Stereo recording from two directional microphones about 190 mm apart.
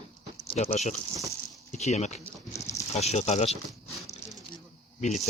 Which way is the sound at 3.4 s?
Centre (ahead or behind).